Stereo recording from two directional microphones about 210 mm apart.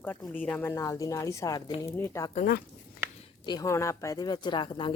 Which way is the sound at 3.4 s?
15° left (ahead or behind).